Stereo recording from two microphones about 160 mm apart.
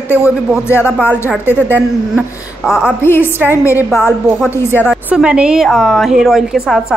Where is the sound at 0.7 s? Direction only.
15° left (ahead or behind).